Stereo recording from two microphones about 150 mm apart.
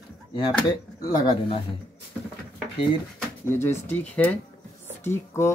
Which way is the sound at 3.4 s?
15° left (ahead or behind).